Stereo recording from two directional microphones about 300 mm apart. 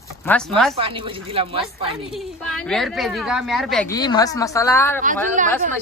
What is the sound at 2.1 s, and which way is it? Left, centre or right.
Speech, centre.